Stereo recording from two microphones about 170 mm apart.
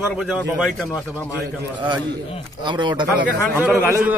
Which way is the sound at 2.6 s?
25° right (ahead or behind).